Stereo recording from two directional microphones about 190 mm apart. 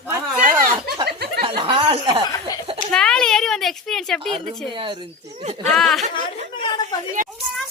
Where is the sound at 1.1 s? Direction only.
60° right (ahead or behind).